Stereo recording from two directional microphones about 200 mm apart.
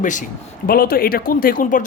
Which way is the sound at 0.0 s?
40° left (ahead or behind).